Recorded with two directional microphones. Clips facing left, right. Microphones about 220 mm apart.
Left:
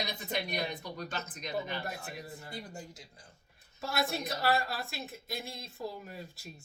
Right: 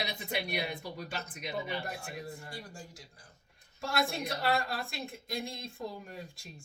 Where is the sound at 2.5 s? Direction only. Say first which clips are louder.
Left 2 dB; 20° left (ahead or behind).